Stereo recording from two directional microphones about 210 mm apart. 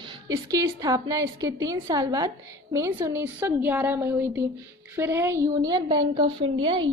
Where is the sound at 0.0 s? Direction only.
20° right (ahead or behind).